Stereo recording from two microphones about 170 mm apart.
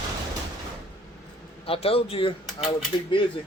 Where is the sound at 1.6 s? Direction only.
35° left (ahead or behind).